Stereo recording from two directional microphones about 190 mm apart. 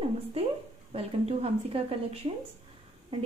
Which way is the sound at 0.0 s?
30° right (ahead or behind).